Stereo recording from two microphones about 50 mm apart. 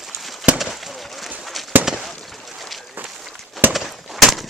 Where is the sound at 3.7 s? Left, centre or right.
Centre.